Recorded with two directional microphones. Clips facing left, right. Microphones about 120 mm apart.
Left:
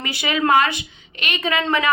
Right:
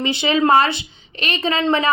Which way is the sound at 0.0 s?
25° right (ahead or behind).